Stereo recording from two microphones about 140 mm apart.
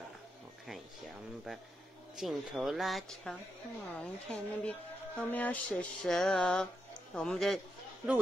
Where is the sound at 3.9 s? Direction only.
10° left (ahead or behind).